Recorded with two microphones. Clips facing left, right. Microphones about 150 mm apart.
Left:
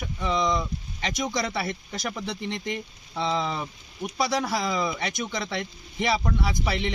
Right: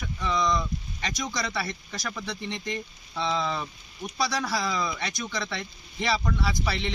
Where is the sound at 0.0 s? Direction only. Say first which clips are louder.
Left 1 dB; 20° left (ahead or behind).